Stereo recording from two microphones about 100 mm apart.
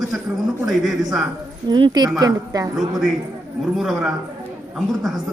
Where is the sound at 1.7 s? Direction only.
45° right (ahead or behind).